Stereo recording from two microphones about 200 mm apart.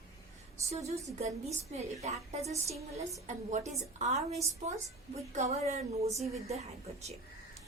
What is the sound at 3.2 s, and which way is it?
A woman's voice, 35° right (ahead or behind).